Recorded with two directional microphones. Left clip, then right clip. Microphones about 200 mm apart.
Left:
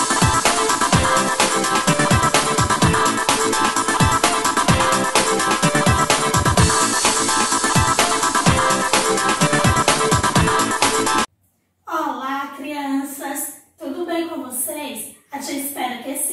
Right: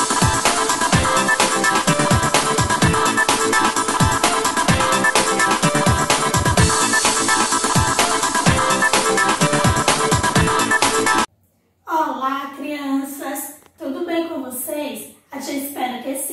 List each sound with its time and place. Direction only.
0.0 s music: centre (ahead or behind)